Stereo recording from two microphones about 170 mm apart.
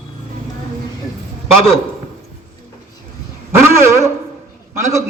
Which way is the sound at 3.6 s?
15° right (ahead or behind).